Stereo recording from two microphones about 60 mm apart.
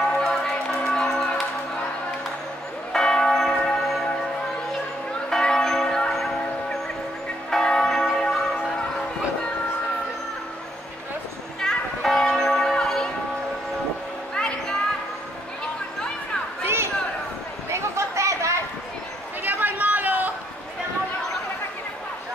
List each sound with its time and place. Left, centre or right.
0.2 s music: centre
2.9 s church bell: centre
5.3 s church bell: centre
7.5 s church bell: centre
11.6 s church bell: centre
14.3 s a sound: centre
16.6 s a sound: right
17.6 s chatter: right
19.4 s chatter: right